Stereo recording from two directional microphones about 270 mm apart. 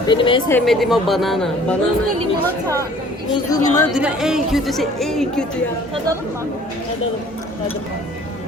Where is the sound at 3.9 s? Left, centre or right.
Centre.